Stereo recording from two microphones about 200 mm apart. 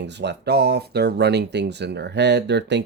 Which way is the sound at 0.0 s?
60° right (ahead or behind).